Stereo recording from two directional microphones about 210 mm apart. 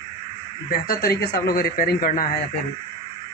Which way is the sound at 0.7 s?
45° left (ahead or behind).